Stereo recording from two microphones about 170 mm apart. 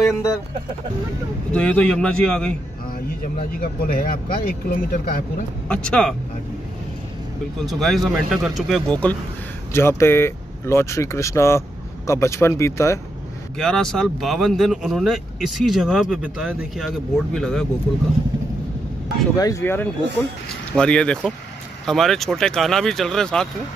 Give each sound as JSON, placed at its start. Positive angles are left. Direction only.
{"t": 1.5, "sound": "speech", "side_deg": 5}
{"t": 3.3, "sound": "speech", "side_deg": 55}
{"t": 5.7, "sound": "speech", "side_deg": 5}
{"t": 7.6, "sound": "speech", "side_deg": 0}
{"t": 13.6, "sound": "speech", "side_deg": 5}
{"t": 19.3, "sound": "speech", "side_deg": 20}